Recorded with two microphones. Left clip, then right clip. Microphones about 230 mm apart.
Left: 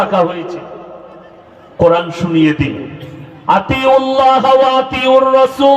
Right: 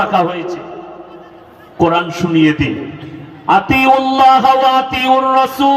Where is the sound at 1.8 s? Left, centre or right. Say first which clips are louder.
Left 2 dB; left.